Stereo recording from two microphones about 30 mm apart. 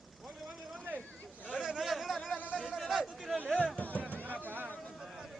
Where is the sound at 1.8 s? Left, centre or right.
Centre.